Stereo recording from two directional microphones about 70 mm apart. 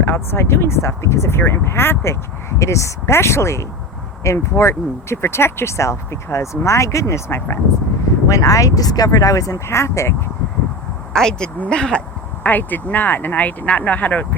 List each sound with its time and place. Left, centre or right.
0.0 s speech: left
8.3 s speech: left
9.6 s speech: left
11.1 s speech: centre
12.4 s speech: left